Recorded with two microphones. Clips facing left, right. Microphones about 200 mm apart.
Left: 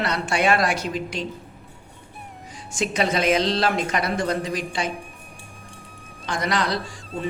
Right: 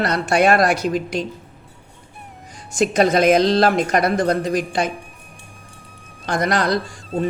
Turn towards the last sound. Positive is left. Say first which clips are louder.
# right 7 dB
turn(degrees=-45)  # may be behind; listen again after turning